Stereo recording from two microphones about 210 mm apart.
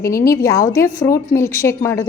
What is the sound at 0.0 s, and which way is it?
A woman's voice, 15° left (ahead or behind).